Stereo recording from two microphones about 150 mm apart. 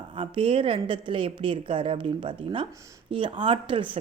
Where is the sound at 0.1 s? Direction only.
35° right (ahead or behind).